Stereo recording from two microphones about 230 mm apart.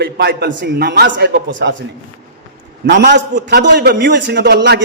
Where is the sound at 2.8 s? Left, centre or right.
Right.